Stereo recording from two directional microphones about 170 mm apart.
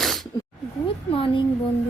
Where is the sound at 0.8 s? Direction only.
30° left (ahead or behind).